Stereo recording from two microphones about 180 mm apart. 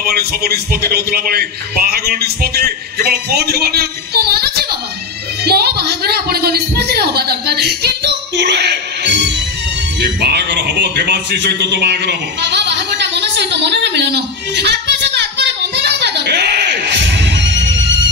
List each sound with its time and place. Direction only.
0.0 s a man's voice: 60° right (ahead or behind)
9.9 s music: 65° right (ahead or behind); by 17.9 s 90° right